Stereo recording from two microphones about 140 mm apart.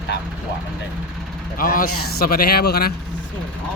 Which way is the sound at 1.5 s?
85° left.